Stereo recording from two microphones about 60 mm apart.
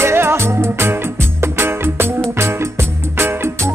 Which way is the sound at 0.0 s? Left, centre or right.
Right.